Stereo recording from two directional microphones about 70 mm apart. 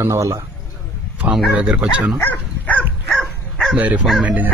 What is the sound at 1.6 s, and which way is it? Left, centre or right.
Speech, centre.